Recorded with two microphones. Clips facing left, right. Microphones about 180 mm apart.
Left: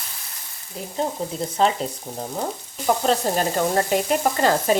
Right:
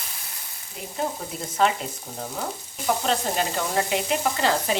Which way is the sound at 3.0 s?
45° left (ahead or behind).